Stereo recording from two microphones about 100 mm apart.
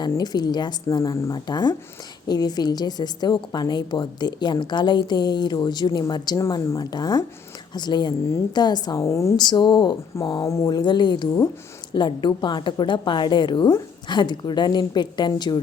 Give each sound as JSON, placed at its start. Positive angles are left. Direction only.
{"t": 0.2, "sound": "a woman's voice", "side_deg": 45}
{"t": 1.5, "sound": "a woman's voice", "side_deg": 45}
{"t": 9.0, "sound": "speech", "side_deg": 30}
{"t": 9.3, "sound": "a woman's voice", "side_deg": 45}
{"t": 10.2, "sound": "speech", "side_deg": 35}
{"t": 10.7, "sound": "a woman's voice", "side_deg": 50}